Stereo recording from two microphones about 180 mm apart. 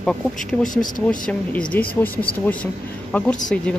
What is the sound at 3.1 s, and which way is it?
Speech, 10° left (ahead or behind).